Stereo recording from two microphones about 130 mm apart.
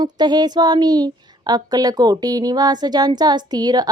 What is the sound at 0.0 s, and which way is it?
A woman's voice, 35° right (ahead or behind).